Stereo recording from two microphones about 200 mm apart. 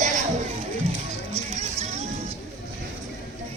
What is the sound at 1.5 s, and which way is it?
Music, 35° right (ahead or behind).